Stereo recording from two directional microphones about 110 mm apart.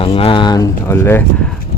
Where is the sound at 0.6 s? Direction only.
25° left (ahead or behind).